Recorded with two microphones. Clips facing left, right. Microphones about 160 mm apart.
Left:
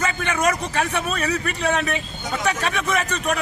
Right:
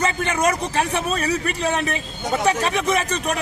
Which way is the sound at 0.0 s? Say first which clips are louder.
Right 1 dB; 30° right (ahead or behind).